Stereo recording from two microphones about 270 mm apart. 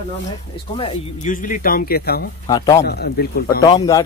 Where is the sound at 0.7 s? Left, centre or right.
Left.